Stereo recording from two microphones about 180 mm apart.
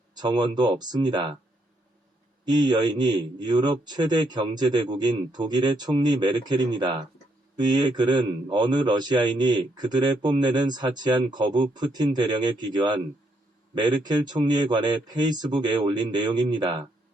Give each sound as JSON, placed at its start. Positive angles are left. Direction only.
{"t": 0.1, "sound": "a man's voice", "side_deg": -25}
{"t": 2.4, "sound": "a man's voice", "side_deg": -25}